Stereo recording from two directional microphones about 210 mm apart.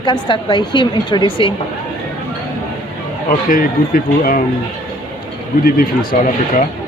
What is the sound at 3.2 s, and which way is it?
A man's voice, 40° left (ahead or behind).